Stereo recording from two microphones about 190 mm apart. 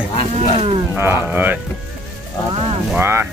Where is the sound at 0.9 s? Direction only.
15° right (ahead or behind).